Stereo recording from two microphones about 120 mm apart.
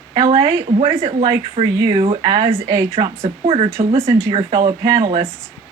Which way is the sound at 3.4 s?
50° right (ahead or behind).